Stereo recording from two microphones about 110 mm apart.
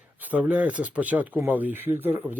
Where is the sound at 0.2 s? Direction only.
15° right (ahead or behind).